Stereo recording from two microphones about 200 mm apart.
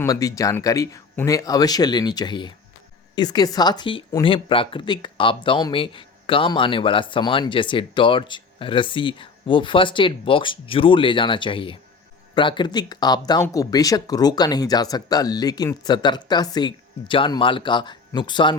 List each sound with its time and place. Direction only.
0.0 s a woman's voice: 15° left (ahead or behind)